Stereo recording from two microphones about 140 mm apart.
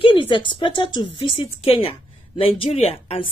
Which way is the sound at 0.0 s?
35° left (ahead or behind).